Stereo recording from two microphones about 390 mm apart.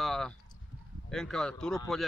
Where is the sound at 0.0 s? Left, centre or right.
Centre.